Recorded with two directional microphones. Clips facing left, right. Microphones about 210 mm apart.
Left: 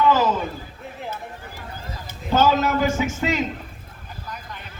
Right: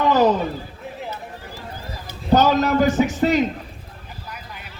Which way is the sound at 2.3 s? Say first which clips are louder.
Right 3 dB; 40° right (ahead or behind).